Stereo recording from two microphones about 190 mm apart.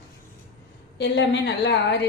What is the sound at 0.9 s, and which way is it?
A woman's voice, 65° left (ahead or behind).